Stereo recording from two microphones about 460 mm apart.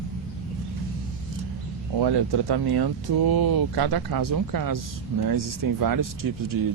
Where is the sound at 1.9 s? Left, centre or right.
Right.